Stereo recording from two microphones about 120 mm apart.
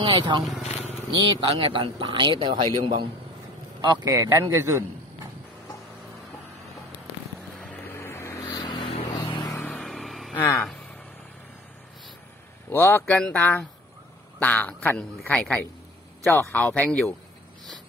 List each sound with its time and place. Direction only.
0.0 s a man's voice: 45° right (ahead or behind)
4.1 s a man's voice: 25° right (ahead or behind)
7.8 s vehicle: 20° left (ahead or behind)
8.5 s vehicle: 35° left (ahead or behind)
8.7 s vehicle: 50° left (ahead or behind)
9.6 s vehicle: 15° left (ahead or behind)
9.8 s vehicle: centre (ahead or behind)
12.6 s a man's voice: 20° left (ahead or behind)
16.3 s speech: 20° left (ahead or behind)
16.6 s a man's voice: 10° left (ahead or behind)